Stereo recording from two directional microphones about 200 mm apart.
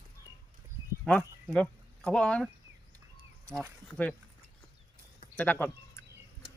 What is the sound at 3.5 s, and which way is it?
Speech, 5° left (ahead or behind).